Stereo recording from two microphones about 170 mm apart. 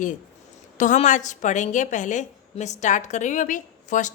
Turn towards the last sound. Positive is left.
turn(degrees=50)  # may be behind; listen again after turning